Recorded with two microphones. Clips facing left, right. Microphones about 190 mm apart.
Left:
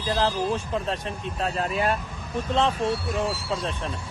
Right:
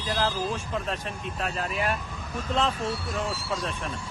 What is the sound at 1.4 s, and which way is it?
Speech, 30° left (ahead or behind).